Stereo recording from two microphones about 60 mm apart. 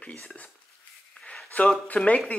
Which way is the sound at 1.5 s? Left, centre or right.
Left.